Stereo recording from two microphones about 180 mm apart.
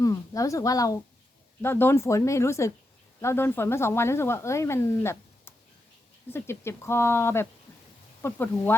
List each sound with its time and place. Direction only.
0.0 s a woman's voice: 20° left (ahead or behind)